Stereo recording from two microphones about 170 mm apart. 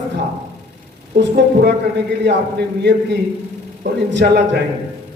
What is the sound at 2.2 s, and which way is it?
A man's voice, 80° right.